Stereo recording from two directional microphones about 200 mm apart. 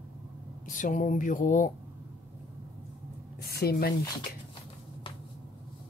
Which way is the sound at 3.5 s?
50° left (ahead or behind).